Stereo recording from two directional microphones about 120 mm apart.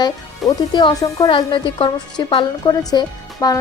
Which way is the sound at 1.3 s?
45° left (ahead or behind).